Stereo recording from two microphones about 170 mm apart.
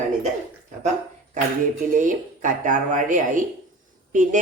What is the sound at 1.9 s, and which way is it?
A woman's voice, 50° right (ahead or behind).